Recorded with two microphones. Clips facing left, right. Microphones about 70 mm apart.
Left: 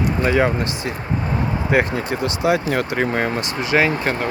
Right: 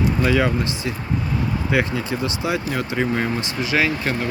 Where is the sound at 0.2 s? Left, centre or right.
Left.